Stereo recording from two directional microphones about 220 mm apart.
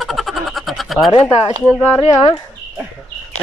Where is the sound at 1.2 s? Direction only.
25° left (ahead or behind).